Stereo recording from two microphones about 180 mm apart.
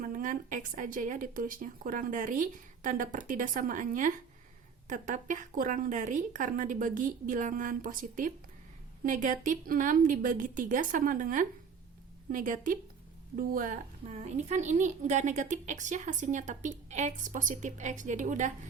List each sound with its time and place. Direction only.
0.0 s a woman's voice: 45° right (ahead or behind)
14.1 s a woman's voice: 40° right (ahead or behind)